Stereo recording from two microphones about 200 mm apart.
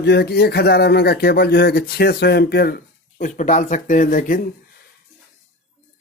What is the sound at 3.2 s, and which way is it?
Speech, 40° left (ahead or behind).